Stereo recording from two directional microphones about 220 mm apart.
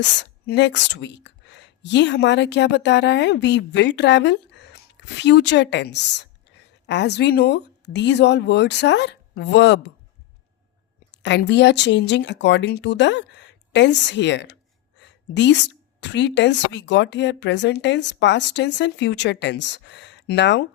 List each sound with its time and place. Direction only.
0.0 s speech: 50° left (ahead or behind)
11.1 s speech: 50° left (ahead or behind)